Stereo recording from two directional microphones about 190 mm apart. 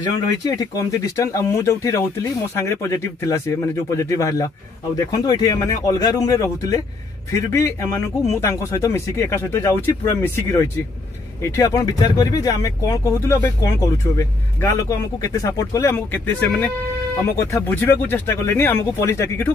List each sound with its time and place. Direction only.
0.4 s speech: 20° left (ahead or behind)